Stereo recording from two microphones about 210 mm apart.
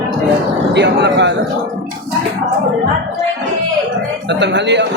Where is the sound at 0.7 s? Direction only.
55° right (ahead or behind).